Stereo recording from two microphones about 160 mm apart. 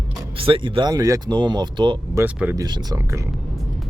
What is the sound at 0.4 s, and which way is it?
Speech, 35° right (ahead or behind).